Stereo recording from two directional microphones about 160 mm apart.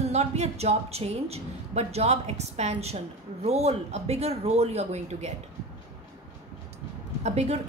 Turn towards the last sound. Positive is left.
turn(degrees=-45)  # may be behind; listen again after turning